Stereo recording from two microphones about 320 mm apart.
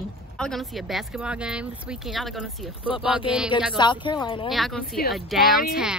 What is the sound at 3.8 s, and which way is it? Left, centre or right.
Speech, centre.